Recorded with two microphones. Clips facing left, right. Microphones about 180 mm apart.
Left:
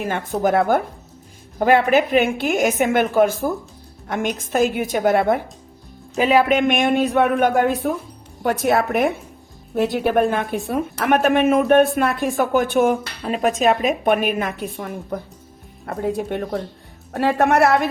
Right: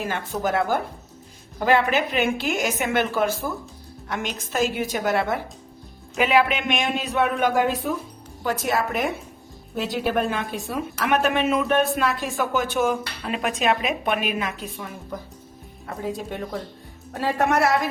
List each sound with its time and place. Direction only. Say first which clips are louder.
0.0 s speech: left 5 dB; 55° left (ahead or behind)
6.1 s speech: left 4 dB; 40° left (ahead or behind); by 13.0 s 55° left (ahead or behind)
13.2 s speech: left 6 dB; 40° left (ahead or behind); by 17.8 s 60° left (ahead or behind)